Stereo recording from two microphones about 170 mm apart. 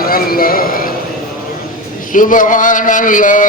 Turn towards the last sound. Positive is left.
turn(degrees=50)  # may be behind; listen again after turning